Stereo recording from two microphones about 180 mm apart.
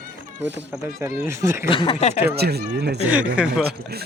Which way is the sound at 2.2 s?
60° right (ahead or behind).